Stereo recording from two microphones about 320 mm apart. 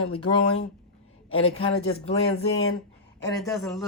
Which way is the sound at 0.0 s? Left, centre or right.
Left.